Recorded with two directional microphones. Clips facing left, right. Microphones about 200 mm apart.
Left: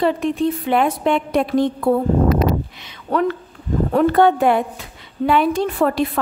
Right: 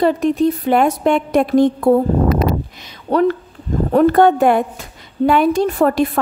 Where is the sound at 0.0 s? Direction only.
40° right (ahead or behind).